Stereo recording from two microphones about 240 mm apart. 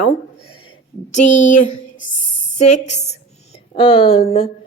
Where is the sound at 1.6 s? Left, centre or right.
Left.